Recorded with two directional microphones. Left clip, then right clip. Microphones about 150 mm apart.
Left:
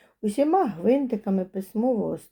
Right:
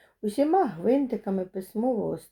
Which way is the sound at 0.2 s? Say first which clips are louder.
Left 1 dB; 35° left (ahead or behind).